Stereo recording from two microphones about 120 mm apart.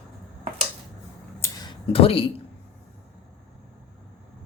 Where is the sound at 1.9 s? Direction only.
50° left (ahead or behind).